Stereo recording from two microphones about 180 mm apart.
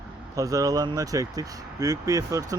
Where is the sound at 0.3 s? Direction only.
20° right (ahead or behind).